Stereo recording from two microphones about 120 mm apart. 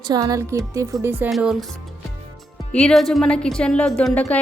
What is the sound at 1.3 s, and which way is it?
Speech, 5° right (ahead or behind).